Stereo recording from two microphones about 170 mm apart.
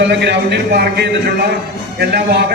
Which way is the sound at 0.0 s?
90° right.